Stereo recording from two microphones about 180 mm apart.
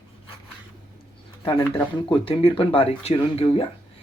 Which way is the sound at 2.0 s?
30° left (ahead or behind).